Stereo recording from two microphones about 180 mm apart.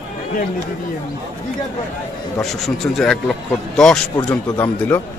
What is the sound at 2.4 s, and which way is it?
Speech, centre (ahead or behind).